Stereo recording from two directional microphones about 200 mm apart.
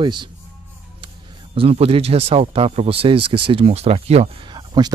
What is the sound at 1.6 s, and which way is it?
Speech, 30° right (ahead or behind).